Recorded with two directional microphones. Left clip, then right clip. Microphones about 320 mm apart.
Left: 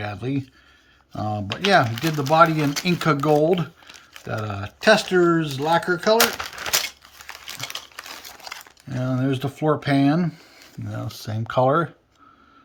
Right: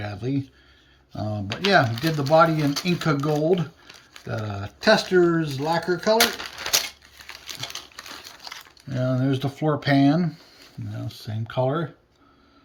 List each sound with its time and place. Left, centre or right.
0.0 s speech: centre
7.6 s crumpling: centre
11.1 s speech: centre